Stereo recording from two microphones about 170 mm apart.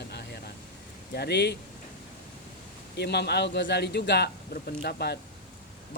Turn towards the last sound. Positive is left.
turn(degrees=70)  # may be behind; listen again after turning